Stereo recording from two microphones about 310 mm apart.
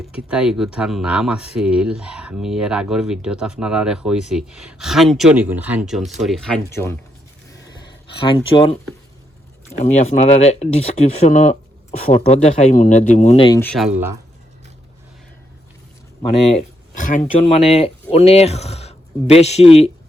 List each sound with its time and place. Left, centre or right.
0.0 s speech: centre
7.8 s a sound: centre
9.7 s speech: left; by 14.2 s centre
16.5 s speech: left